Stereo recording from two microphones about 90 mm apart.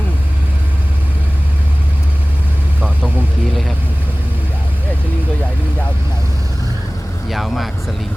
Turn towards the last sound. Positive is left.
turn(degrees=0)  # may be behind; listen again after turning